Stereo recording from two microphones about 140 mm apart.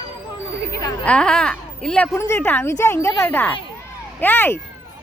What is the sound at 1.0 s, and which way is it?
A woman's voice, 5° left (ahead or behind).